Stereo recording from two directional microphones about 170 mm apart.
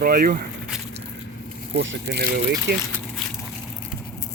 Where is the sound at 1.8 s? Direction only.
90° right.